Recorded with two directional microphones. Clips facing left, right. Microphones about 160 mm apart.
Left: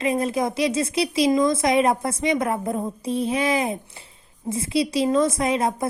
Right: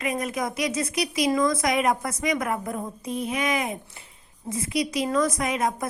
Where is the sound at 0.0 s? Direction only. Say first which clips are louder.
Left 5 dB; 30° left (ahead or behind).